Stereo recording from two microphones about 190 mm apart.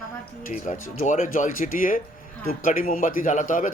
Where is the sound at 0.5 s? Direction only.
40° left (ahead or behind).